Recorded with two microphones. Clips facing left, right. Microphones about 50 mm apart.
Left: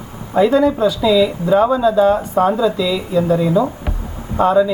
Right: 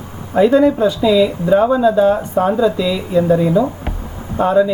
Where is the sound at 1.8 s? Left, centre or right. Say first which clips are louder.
Right 1 dB; right.